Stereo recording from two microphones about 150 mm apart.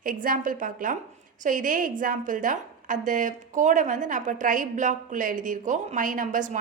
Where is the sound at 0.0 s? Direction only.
65° right (ahead or behind).